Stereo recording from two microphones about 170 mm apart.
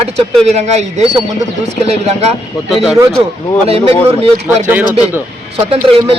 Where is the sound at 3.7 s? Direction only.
35° right (ahead or behind).